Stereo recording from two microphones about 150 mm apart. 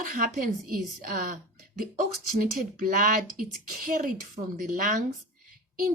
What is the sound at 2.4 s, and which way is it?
Speech, 65° right (ahead or behind).